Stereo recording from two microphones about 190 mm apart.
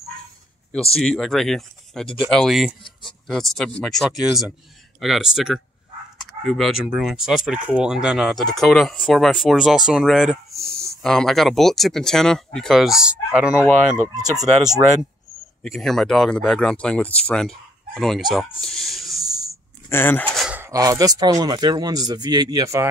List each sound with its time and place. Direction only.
0.9 s speech: centre (ahead or behind)
14.0 s speech: 20° right (ahead or behind)
15.6 s speech: centre (ahead or behind)
18.6 s a sound: centre (ahead or behind)
19.9 s speech: 10° left (ahead or behind); by 22.8 s 15° right (ahead or behind)